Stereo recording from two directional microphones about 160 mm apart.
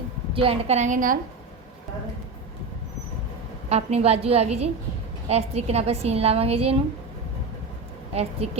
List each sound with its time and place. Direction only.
0.3 s a woman's voice: 40° right (ahead or behind); by 1.2 s 55° right (ahead or behind)
3.7 s a woman's voice: 40° right (ahead or behind)
8.1 s a woman's voice: 40° right (ahead or behind)